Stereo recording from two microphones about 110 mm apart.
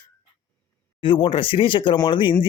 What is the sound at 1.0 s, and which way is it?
Speech, 50° left (ahead or behind).